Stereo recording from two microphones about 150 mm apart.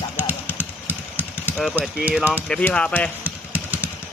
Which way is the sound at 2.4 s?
5° left (ahead or behind).